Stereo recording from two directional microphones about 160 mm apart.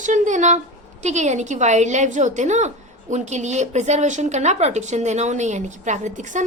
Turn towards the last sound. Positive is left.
turn(degrees=-50)  # may be behind; listen again after turning